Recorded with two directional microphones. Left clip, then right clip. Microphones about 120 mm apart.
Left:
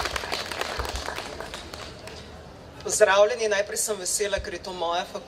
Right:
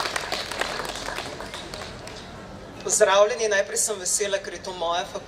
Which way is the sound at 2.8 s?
45° right (ahead or behind).